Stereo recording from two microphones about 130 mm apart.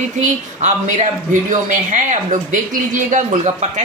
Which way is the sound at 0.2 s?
70° right (ahead or behind).